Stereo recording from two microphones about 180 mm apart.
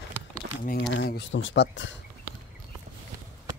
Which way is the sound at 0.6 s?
50° left (ahead or behind).